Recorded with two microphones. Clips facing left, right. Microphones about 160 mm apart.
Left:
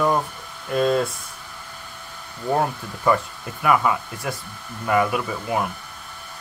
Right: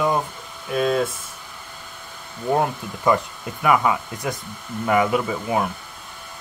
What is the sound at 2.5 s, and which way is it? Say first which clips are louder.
Speech: right 1 dB; 15° right (ahead or behind).